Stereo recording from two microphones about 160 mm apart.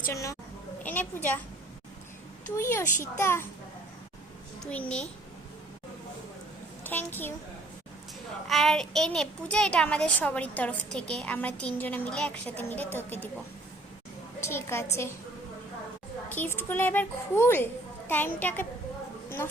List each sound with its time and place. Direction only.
0.1 s a child's voice: 20° left (ahead or behind)
2.6 s a child's voice: 15° left (ahead or behind)
4.6 s a child's voice: 10° left (ahead or behind)
6.8 s a child's voice: 10° left (ahead or behind)
8.4 s a child's voice: centre (ahead or behind)
14.4 s a child's voice: 15° left (ahead or behind)
16.3 s a child's voice: 10° left (ahead or behind)